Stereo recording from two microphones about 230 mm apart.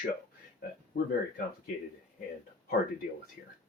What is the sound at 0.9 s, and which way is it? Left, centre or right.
Speech, left.